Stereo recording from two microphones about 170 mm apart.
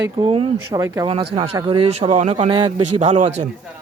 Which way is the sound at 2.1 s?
40° right (ahead or behind).